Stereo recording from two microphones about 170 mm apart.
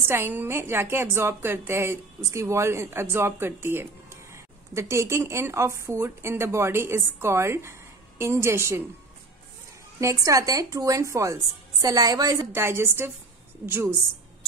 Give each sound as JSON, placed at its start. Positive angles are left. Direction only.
{"t": 0.0, "sound": "a woman's voice", "side_deg": -15}
{"t": 9.9, "sound": "a woman's voice", "side_deg": -20}